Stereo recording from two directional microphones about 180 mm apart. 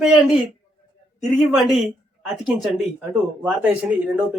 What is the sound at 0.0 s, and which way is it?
Speech, 5° right (ahead or behind).